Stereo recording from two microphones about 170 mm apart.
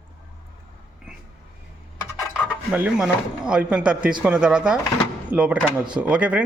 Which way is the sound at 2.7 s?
5° right (ahead or behind).